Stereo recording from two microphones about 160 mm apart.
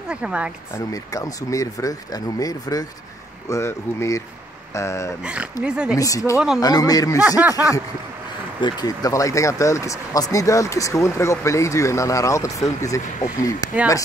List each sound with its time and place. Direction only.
0.1 s speech: 5° right (ahead or behind)
0.7 s speech: 20° left (ahead or behind)
5.2 s speech: 5° right (ahead or behind)
5.9 s speech: 20° left (ahead or behind)
6.3 s speech: 5° right (ahead or behind)
6.6 s speech: 25° left (ahead or behind)
7.2 s speech: 10° right (ahead or behind)
8.5 s speech: 25° left (ahead or behind)